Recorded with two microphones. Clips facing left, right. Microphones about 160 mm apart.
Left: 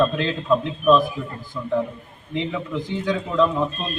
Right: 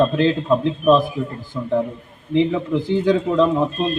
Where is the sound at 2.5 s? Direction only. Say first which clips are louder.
Right 7 dB; 30° right (ahead or behind).